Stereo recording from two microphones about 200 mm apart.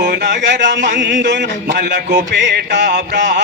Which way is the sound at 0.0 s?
55° right (ahead or behind).